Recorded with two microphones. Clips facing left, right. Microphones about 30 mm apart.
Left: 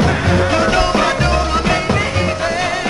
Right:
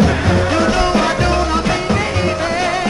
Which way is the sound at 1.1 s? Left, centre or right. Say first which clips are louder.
Even; left.